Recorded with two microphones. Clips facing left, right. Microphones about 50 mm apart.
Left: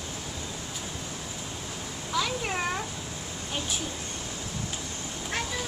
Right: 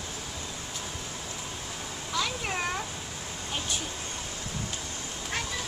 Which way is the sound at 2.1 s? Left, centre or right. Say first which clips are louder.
Left 2 dB; centre.